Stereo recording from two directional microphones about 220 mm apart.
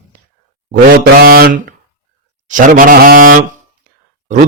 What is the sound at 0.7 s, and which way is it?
Speech, 45° right (ahead or behind).